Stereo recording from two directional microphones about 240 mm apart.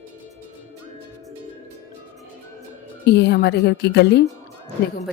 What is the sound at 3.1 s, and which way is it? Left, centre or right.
Speech, left.